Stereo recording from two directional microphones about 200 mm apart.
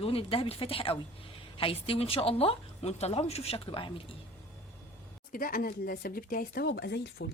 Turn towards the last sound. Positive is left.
turn(degrees=60)  # may be behind; listen again after turning